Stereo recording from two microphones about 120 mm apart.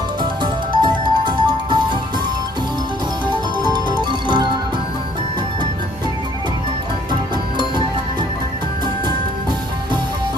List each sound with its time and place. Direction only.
0.2 s music: 40° right (ahead or behind)
3.7 s music: 35° right (ahead or behind)
7.1 s music: 40° right (ahead or behind)